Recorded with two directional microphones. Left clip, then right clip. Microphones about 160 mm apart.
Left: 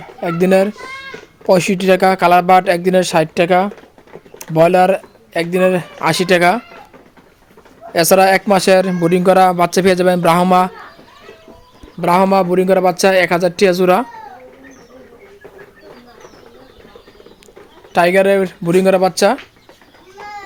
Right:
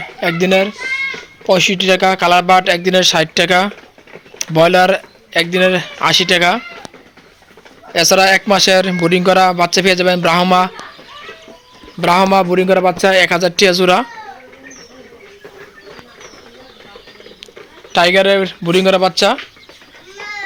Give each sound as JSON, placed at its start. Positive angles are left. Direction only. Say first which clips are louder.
{"t": 0.3, "sound": "a man's voice", "louder": "left 2 dB", "side_deg": 30}
{"t": 7.9, "sound": "speech", "louder": "even", "side_deg": 25}
{"t": 11.9, "sound": "a man's voice", "louder": "right 1 dB", "side_deg": 5}
{"t": 17.9, "sound": "speech", "louder": "right 1 dB", "side_deg": 15}